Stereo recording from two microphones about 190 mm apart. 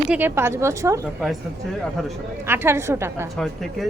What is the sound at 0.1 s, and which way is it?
Speech, 10° right (ahead or behind).